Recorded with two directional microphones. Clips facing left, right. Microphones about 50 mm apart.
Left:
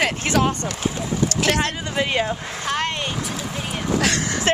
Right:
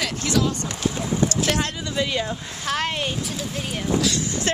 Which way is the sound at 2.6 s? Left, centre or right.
Centre.